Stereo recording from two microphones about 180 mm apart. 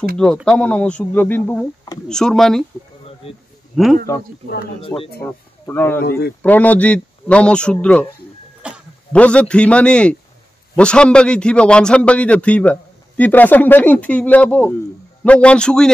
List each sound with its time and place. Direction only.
0.5 s a man's voice: 5° left (ahead or behind)
3.8 s a man's voice: centre (ahead or behind)
4.8 s speech: 30° left (ahead or behind)
5.2 s speech: 10° left (ahead or behind)
5.9 s speech: 60° left (ahead or behind)
6.4 s a man's voice: 10° left (ahead or behind)
8.6 s a sound: 5° right (ahead or behind)
9.1 s a man's voice: 5° left (ahead or behind)